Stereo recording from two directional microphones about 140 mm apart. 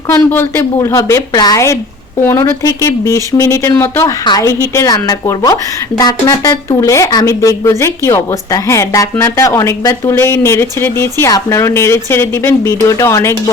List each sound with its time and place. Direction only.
0.1 s speech: 15° left (ahead or behind)